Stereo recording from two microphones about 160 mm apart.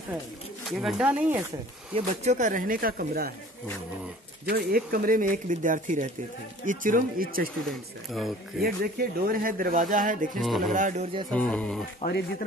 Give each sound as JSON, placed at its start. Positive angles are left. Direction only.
{"t": 0.7, "sound": "speech", "side_deg": 0}
{"t": 2.0, "sound": "speech", "side_deg": -50}
{"t": 4.5, "sound": "speech", "side_deg": -70}
{"t": 8.5, "sound": "speech", "side_deg": -70}
{"t": 10.3, "sound": "speech", "side_deg": 0}
{"t": 10.7, "sound": "speech", "side_deg": -50}
{"t": 11.2, "sound": "speech", "side_deg": 5}
{"t": 12.0, "sound": "speech", "side_deg": 75}